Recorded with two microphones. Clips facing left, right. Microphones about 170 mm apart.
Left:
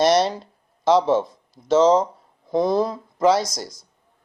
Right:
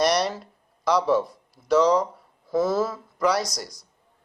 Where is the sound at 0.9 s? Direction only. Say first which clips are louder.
Left 4 dB; 25° left (ahead or behind).